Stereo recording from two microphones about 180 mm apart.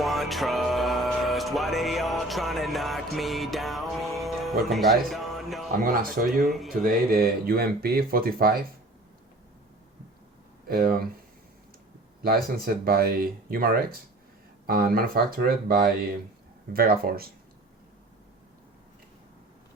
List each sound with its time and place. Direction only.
0.0 s music: centre (ahead or behind)
4.7 s speech: centre (ahead or behind)
5.8 s speech: 50° right (ahead or behind)
6.5 s speech: centre (ahead or behind)
6.8 s speech: 55° right (ahead or behind)
10.7 s speech: 55° right (ahead or behind)
12.6 s speech: 55° right (ahead or behind)